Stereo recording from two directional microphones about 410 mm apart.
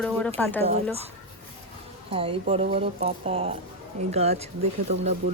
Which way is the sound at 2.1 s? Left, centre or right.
Centre.